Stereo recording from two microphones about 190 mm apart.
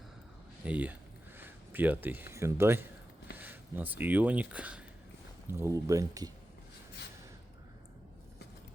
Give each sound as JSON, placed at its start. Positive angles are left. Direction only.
{"t": 0.6, "sound": "speech", "side_deg": -10}